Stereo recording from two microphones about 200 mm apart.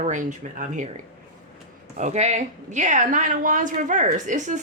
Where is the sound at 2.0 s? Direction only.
35° right (ahead or behind).